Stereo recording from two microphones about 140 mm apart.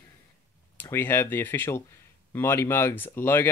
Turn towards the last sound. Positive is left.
turn(degrees=15)  # may be behind; listen again after turning